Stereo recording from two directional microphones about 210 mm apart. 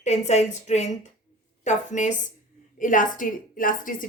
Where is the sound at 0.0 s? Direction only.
30° left (ahead or behind).